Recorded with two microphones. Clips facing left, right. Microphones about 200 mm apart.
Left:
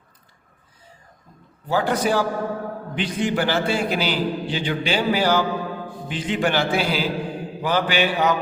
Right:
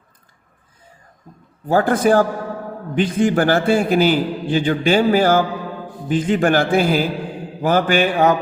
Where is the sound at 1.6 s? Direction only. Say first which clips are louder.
Right 6 dB; 50° right (ahead or behind).